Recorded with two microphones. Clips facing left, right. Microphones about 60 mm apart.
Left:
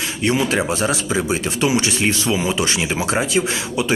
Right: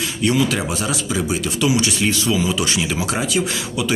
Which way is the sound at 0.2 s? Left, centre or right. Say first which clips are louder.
Even; left.